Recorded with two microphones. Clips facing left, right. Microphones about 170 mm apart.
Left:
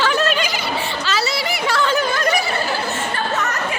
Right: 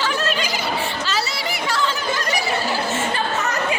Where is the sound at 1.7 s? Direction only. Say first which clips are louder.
Left 5 dB; 60° left (ahead or behind).